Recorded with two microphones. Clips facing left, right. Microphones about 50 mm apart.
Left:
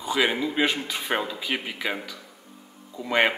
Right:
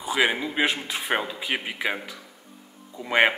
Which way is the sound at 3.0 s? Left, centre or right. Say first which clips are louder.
Right 2 dB; centre.